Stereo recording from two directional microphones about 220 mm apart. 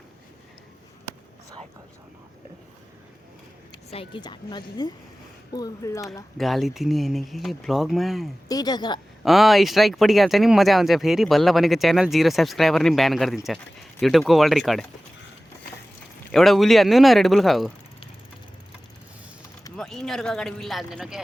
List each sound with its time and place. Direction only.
3.8 s a woman's voice: 25° left (ahead or behind)
6.3 s speech: centre (ahead or behind)
8.4 s speech: 15° left (ahead or behind)
9.2 s speech: centre (ahead or behind)
16.3 s speech: centre (ahead or behind)
19.7 s speech: centre (ahead or behind)